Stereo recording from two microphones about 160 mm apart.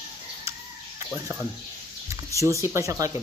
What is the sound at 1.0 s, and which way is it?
Speech, 15° right (ahead or behind).